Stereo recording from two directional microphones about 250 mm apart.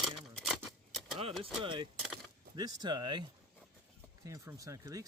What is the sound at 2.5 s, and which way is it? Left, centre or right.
Speech, centre.